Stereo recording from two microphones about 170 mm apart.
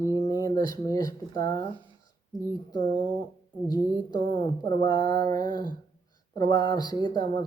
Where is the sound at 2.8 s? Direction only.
50° right (ahead or behind).